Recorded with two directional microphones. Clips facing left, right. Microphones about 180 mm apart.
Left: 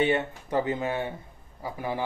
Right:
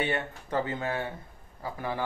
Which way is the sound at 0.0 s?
15° left (ahead or behind).